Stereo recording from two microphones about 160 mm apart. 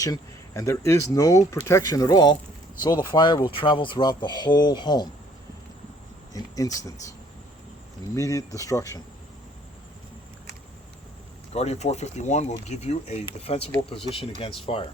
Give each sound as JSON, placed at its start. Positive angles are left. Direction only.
{"t": 0.0, "sound": "speech", "side_deg": 20}
{"t": 6.6, "sound": "speech", "side_deg": 25}
{"t": 8.1, "sound": "speech", "side_deg": 20}
{"t": 11.5, "sound": "speech", "side_deg": 40}